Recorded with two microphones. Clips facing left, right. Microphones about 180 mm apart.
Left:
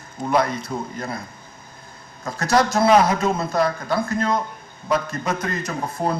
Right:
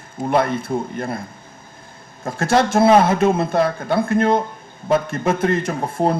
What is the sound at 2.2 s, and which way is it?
Speech, 25° right (ahead or behind).